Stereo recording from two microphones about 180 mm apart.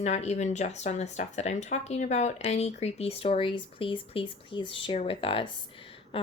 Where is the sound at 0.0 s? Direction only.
40° left (ahead or behind).